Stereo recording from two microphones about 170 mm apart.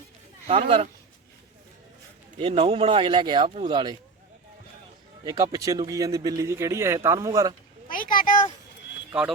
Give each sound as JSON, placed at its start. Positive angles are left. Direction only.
{"t": 0.4, "sound": "speech", "side_deg": -35}
{"t": 2.4, "sound": "speech", "side_deg": -30}
{"t": 5.2, "sound": "speech", "side_deg": -20}
{"t": 7.9, "sound": "a sound", "side_deg": 55}